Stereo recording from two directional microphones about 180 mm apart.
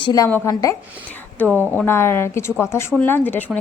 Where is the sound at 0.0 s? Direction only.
20° left (ahead or behind).